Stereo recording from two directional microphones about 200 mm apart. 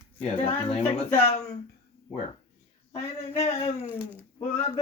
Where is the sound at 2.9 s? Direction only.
35° left (ahead or behind).